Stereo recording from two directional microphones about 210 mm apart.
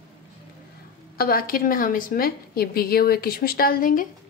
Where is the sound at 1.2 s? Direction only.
45° left (ahead or behind).